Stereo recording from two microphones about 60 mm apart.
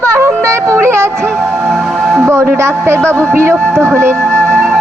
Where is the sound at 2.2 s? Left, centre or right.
Right.